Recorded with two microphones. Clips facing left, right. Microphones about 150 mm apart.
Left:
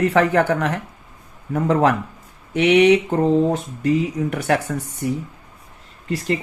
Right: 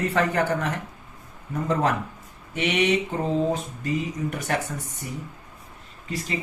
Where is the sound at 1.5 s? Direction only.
75° left (ahead or behind).